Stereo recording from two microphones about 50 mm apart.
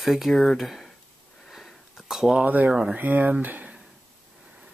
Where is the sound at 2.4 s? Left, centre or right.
Right.